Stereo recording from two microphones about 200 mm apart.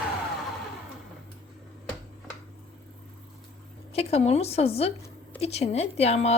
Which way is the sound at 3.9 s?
30° left (ahead or behind).